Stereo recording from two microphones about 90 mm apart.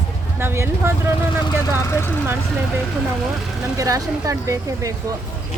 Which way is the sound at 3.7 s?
40° right (ahead or behind).